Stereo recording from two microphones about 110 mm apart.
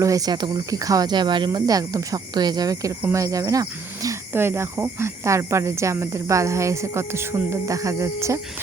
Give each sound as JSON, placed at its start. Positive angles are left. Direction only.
{"t": 0.0, "sound": "speech", "side_deg": -35}